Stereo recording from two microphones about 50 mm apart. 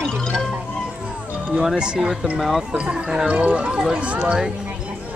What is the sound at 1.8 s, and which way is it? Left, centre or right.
Speech, centre.